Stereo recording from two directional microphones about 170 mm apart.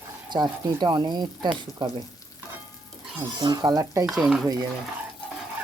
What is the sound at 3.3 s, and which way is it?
Speech, 25° right (ahead or behind).